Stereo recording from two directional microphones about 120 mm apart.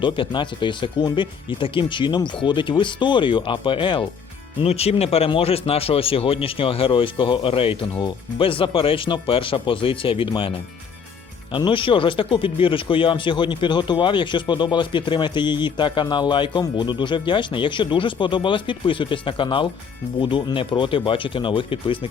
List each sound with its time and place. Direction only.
0.0 s speech: 45° left (ahead or behind)
4.6 s speech: 60° left (ahead or behind)
11.5 s speech: 45° left (ahead or behind)